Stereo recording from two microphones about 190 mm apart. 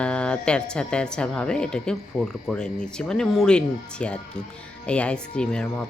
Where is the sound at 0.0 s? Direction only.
5° left (ahead or behind).